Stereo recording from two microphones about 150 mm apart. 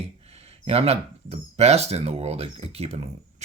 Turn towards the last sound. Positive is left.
turn(degrees=-45)  # may be behind; listen again after turning